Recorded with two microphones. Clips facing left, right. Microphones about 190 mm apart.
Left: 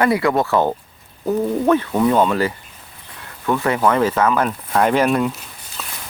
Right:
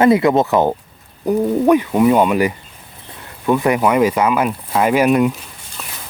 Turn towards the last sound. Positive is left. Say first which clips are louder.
# right 3 dB
turn(degrees=-15)  # may be behind; listen again after turning